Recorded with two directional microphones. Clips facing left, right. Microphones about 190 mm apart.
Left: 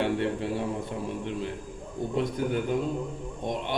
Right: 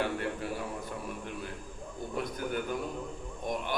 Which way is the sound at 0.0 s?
25° left (ahead or behind).